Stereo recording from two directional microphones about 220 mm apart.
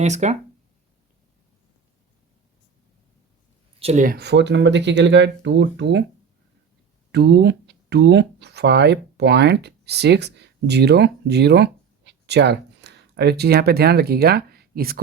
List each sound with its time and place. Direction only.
0.0 s speech: 30° right (ahead or behind)
3.8 s speech: 30° right (ahead or behind); by 6.0 s 50° right (ahead or behind)
7.1 s speech: 50° right (ahead or behind)